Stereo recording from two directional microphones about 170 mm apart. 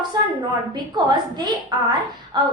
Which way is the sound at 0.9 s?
25° right (ahead or behind).